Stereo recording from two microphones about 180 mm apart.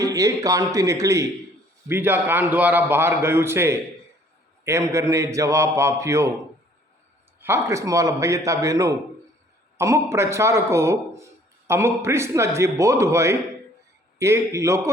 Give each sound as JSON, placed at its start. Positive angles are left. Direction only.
{"t": 0.0, "sound": "a man's voice", "side_deg": -20}
{"t": 7.4, "sound": "a man's voice", "side_deg": -15}